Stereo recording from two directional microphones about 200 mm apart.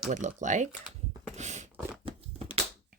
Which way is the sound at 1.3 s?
35° right (ahead or behind).